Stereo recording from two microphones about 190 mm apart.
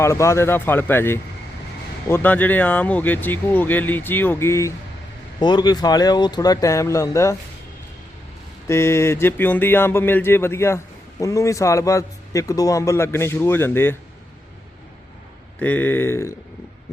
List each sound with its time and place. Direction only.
0.0 s a man's voice: 15° left (ahead or behind)
8.6 s a man's voice: 15° left (ahead or behind)
15.5 s a man's voice: 10° left (ahead or behind)